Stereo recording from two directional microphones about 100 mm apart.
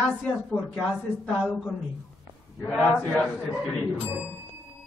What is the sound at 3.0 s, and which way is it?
Speech, 10° left (ahead or behind).